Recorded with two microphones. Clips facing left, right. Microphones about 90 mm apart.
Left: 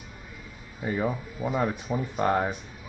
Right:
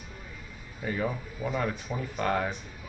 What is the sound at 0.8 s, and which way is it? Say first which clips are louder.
Speech: left 3 dB; 25° left (ahead or behind).